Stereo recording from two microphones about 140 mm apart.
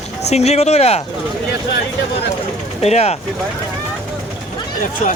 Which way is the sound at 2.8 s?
50° left (ahead or behind).